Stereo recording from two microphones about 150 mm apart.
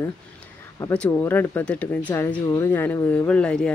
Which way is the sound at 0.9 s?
10° left (ahead or behind).